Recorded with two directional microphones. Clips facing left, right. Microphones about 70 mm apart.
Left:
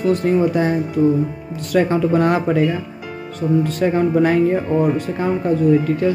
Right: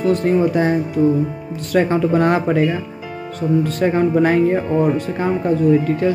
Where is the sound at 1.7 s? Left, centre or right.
Right.